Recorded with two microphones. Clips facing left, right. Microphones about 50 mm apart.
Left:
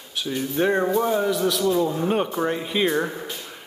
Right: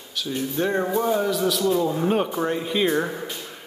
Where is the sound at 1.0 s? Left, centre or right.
Centre.